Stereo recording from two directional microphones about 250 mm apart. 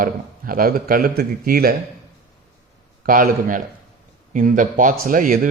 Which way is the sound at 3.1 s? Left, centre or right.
Right.